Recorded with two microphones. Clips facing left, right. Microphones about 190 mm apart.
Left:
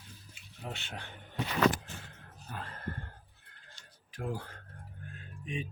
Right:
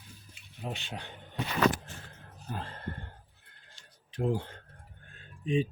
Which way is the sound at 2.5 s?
30° right (ahead or behind).